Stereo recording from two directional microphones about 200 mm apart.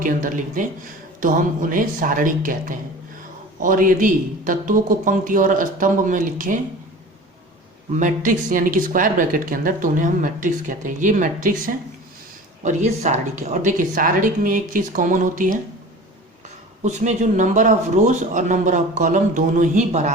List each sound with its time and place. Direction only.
0.0 s a man's voice: 40° right (ahead or behind)
7.9 s speech: 40° right (ahead or behind)
16.8 s speech: 35° right (ahead or behind)